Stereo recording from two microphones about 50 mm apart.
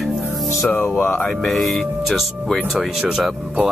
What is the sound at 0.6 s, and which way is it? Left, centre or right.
Speech, left.